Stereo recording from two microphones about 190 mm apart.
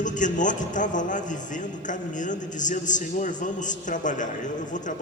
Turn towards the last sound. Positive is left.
turn(degrees=40)  # may be behind; listen again after turning